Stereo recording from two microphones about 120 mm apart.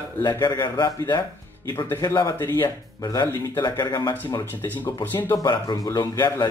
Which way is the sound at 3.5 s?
35° left (ahead or behind).